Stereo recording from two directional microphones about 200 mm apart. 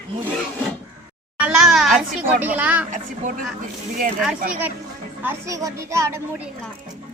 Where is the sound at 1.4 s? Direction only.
5° right (ahead or behind).